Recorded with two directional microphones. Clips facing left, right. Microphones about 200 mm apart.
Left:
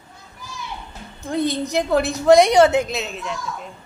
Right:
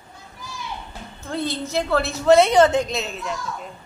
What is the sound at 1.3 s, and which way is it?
A woman's voice, 15° left (ahead or behind).